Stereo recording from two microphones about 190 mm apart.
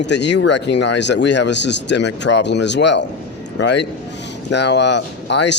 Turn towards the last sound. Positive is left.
turn(degrees=65)  # may be behind; listen again after turning